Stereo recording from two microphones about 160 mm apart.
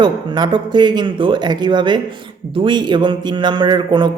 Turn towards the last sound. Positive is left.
turn(degrees=-30)  # may be behind; listen again after turning